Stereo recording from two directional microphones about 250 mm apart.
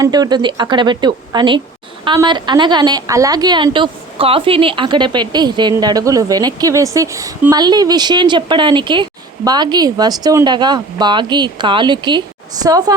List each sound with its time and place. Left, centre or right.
0.0 s a woman's voice: centre